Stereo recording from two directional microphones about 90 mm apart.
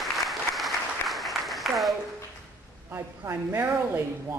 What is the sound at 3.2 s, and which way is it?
Speech, 25° right (ahead or behind).